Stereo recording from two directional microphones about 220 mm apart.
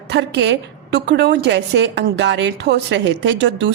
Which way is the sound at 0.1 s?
50° right (ahead or behind).